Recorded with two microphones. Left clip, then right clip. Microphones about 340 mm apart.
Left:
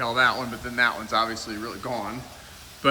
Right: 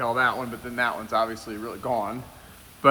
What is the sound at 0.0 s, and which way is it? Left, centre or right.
A man's voice, centre.